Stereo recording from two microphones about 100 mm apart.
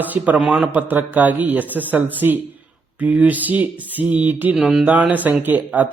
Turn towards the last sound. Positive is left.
turn(degrees=-15)  # may be behind; listen again after turning